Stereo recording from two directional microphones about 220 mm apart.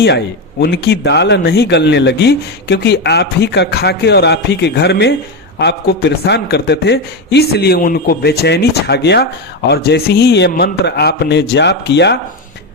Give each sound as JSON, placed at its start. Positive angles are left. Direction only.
{"t": 0.6, "sound": "speech", "side_deg": 50}